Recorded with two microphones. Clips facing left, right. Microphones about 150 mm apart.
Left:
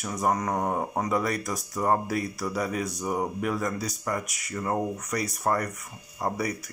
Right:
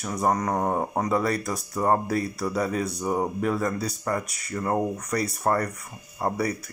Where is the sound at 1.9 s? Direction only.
40° right (ahead or behind).